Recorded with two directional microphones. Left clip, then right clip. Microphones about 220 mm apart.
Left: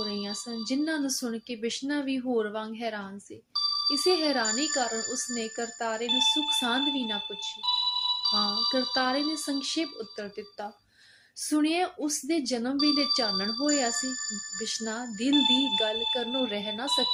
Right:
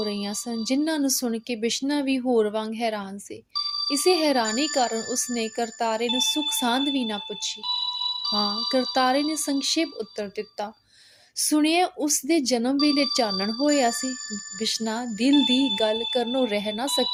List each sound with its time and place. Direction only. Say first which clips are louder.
0.0 s a woman's voice: right 4 dB; 40° right (ahead or behind)